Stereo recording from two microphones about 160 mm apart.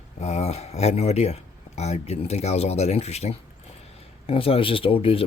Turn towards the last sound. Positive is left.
turn(degrees=35)  # may be behind; listen again after turning